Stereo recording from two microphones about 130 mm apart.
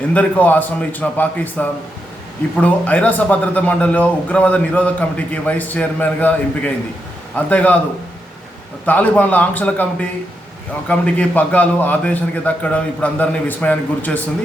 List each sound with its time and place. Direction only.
0.1 s a man's voice: 10° left (ahead or behind)
8.9 s a man's voice: 10° left (ahead or behind)
10.8 s a man's voice: 10° left (ahead or behind)